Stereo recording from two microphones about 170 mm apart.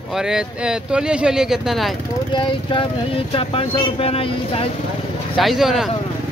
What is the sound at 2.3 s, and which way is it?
Speech, 30° left (ahead or behind).